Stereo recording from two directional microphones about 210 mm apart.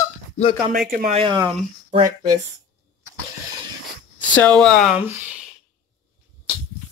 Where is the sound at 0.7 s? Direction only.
40° right (ahead or behind); by 1.5 s 25° right (ahead or behind).